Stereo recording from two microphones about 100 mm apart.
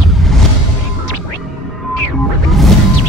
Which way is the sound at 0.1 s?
Centre (ahead or behind).